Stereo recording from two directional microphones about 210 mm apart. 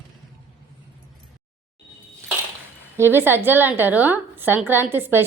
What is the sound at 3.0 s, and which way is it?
A woman's voice, 10° right (ahead or behind).